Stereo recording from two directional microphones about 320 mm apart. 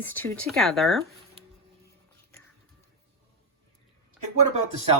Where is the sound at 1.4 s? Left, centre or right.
Centre.